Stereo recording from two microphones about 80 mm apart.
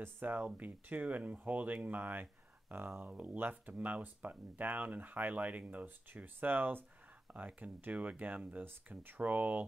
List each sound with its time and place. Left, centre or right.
0.0 s speech: right